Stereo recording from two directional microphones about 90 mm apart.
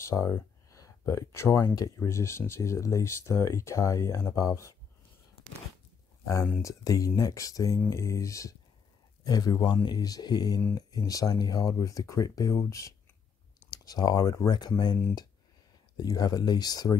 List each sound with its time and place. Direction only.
0.0 s a sound: 35° left (ahead or behind)
1.6 s speech: 45° left (ahead or behind)
2.0 s speech: 30° left (ahead or behind)
6.6 s speech: 40° left (ahead or behind)
9.2 s speech: 45° left (ahead or behind)
13.7 s speech: 45° left (ahead or behind)